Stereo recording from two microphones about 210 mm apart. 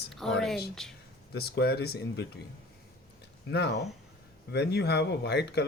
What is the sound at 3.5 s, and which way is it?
Speech, 55° left (ahead or behind).